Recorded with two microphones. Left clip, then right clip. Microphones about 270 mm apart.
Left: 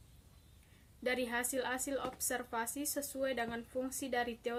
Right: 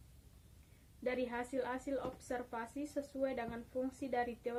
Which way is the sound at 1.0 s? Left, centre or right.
Centre.